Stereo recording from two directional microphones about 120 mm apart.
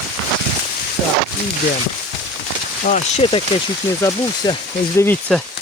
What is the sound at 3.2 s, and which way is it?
Speech, 55° left (ahead or behind).